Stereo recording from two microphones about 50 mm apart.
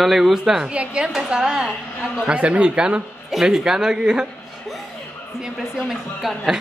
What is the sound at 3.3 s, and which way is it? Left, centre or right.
Speech, centre.